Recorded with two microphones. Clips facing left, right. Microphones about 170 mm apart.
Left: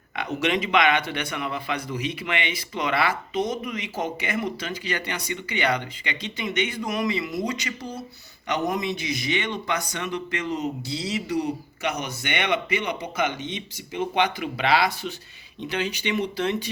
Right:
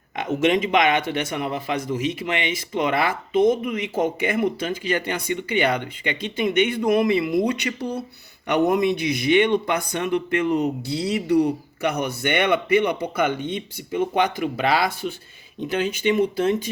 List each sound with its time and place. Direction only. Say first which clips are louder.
0.2 s a man's voice: right 5 dB; 45° right (ahead or behind)